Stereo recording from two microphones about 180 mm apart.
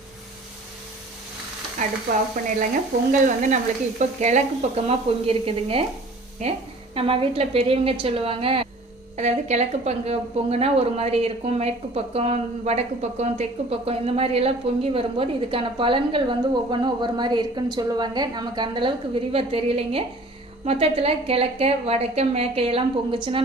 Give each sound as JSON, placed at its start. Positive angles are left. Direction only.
{"t": 1.8, "sound": "stir", "side_deg": -45}
{"t": 3.1, "sound": "a woman's voice", "side_deg": -45}